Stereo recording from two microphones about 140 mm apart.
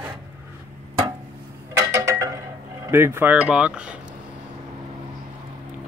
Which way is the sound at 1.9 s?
25° right (ahead or behind).